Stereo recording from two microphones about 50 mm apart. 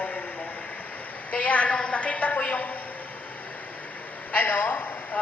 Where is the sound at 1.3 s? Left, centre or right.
Left.